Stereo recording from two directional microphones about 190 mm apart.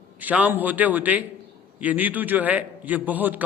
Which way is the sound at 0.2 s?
10° right (ahead or behind).